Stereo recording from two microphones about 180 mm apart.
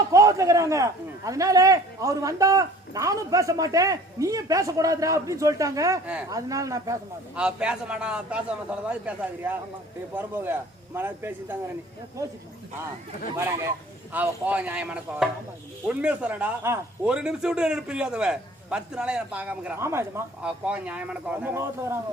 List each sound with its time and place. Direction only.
0.1 s a man's voice: 20° right (ahead or behind)
7.3 s a man's voice: 5° right (ahead or behind)
13.3 s a man's voice: 15° right (ahead or behind)